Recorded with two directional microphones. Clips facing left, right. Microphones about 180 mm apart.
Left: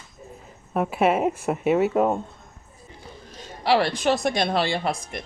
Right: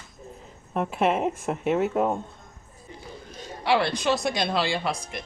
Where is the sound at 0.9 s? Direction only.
5° left (ahead or behind).